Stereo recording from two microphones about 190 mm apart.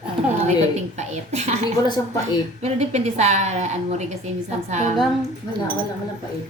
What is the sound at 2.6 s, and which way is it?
A woman's voice, 35° right (ahead or behind).